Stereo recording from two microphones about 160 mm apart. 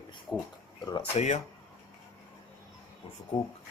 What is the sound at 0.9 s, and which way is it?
Speech, 25° left (ahead or behind).